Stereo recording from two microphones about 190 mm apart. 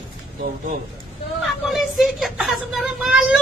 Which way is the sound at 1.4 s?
Centre (ahead or behind).